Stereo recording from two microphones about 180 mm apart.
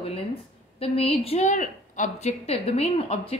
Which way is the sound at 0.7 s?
35° left (ahead or behind).